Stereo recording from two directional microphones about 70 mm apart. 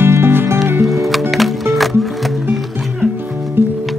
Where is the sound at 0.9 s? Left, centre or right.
Centre.